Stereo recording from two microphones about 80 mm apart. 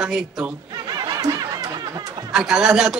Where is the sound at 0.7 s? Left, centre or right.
Right.